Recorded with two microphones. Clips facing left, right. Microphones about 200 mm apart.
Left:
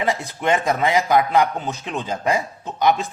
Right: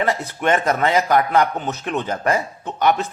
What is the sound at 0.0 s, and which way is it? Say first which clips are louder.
Speech: right 1 dB; 15° left (ahead or behind).